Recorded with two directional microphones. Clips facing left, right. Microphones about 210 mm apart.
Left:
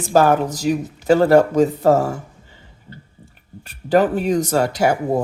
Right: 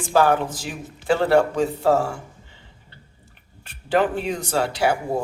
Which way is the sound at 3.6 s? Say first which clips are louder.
Left 5 dB; 40° left (ahead or behind).